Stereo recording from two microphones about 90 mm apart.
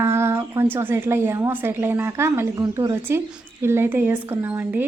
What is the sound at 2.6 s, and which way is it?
Speech, 50° right (ahead or behind).